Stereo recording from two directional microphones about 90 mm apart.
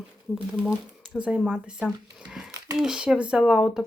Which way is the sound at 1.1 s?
10° right (ahead or behind).